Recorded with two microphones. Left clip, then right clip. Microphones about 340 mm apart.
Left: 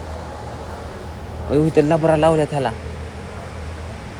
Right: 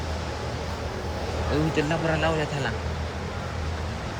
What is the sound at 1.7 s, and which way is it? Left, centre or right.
Speech, centre.